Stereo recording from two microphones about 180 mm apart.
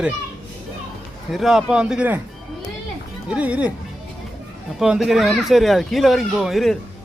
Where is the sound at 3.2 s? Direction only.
5° right (ahead or behind).